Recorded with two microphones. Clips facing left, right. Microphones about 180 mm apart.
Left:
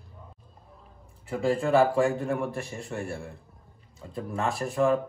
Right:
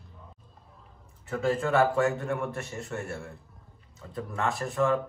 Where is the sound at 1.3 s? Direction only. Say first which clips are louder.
Left 1 dB; 30° left (ahead or behind).